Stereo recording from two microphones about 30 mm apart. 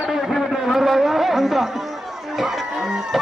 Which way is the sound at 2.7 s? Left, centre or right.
Centre.